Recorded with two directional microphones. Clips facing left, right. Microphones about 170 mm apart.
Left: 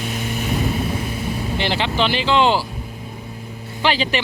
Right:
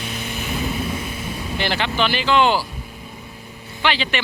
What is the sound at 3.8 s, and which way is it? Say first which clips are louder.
Speech: left 2 dB; 35° left (ahead or behind).